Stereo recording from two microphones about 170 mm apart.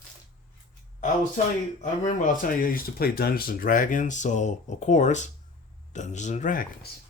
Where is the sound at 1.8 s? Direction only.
50° left (ahead or behind).